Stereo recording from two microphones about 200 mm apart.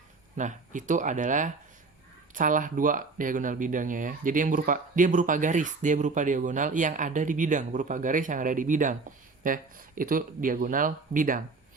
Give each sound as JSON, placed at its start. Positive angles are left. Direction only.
{"t": 0.3, "sound": "speech", "side_deg": -40}